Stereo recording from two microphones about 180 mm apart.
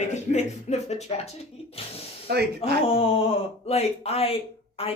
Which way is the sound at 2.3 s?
65° right (ahead or behind).